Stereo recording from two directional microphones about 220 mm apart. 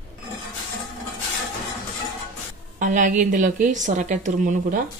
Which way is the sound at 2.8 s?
35° right (ahead or behind).